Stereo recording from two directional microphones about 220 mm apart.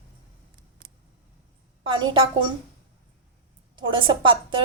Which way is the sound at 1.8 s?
20° right (ahead or behind).